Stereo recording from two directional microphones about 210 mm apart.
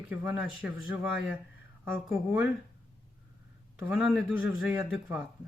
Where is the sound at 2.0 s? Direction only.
5° right (ahead or behind).